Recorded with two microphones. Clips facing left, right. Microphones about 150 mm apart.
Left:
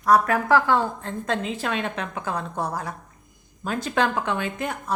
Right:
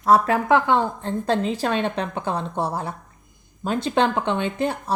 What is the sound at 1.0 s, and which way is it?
A woman's voice, 35° right (ahead or behind).